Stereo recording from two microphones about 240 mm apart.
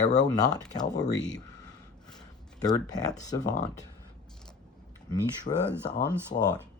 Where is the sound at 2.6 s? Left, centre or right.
Centre.